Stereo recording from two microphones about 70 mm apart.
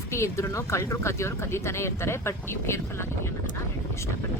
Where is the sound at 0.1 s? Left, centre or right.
Left.